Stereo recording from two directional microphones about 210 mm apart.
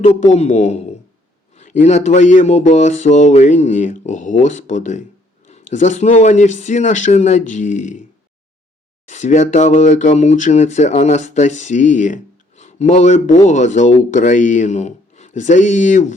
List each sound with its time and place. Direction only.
0.0 s speech: 30° left (ahead or behind)
9.0 s speech: 35° left (ahead or behind)